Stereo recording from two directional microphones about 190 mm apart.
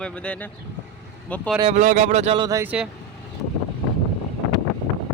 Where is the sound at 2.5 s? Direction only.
15° right (ahead or behind).